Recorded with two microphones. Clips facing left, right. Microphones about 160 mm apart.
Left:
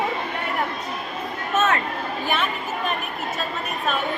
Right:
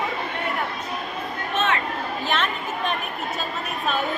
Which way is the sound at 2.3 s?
10° left (ahead or behind).